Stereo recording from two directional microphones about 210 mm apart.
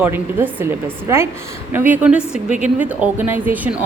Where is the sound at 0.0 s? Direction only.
10° right (ahead or behind).